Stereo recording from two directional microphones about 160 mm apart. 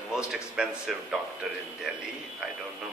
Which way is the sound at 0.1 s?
5° right (ahead or behind).